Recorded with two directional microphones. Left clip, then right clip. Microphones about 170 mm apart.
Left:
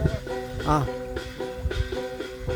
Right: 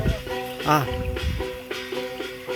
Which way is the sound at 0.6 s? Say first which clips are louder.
Right 4 dB; centre (ahead or behind).